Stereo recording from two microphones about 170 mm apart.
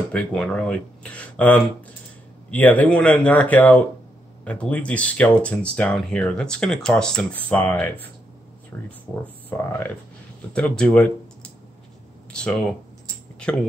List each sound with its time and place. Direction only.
0.1 s speech: 5° left (ahead or behind)
12.3 s speech: 5° left (ahead or behind)